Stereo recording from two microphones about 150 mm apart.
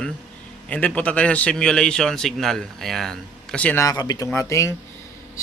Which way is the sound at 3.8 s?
25° left (ahead or behind).